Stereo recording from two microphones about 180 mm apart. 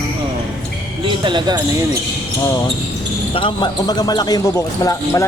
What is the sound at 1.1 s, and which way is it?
Speech, 25° right (ahead or behind).